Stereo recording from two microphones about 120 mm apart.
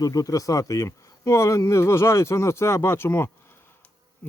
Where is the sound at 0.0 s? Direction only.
30° left (ahead or behind).